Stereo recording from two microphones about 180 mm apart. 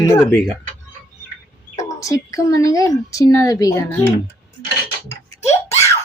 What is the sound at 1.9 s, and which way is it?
Speech, 20° left (ahead or behind).